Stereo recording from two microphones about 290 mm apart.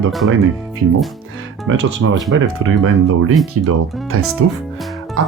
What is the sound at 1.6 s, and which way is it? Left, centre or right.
Speech, right.